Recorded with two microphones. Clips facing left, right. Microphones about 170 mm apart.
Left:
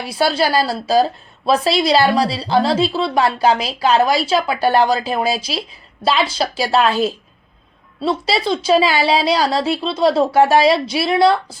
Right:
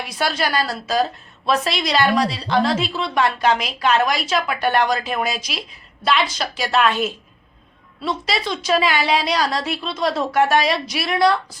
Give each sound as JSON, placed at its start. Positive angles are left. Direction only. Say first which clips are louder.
{"t": 0.0, "sound": "a woman's voice", "louder": "left 5 dB", "side_deg": 30}